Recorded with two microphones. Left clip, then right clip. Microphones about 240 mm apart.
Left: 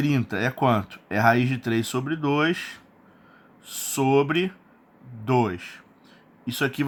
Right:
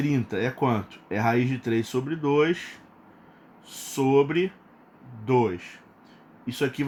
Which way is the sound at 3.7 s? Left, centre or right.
Left.